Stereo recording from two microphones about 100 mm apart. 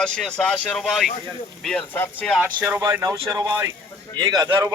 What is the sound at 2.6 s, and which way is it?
A man's voice, 30° right (ahead or behind).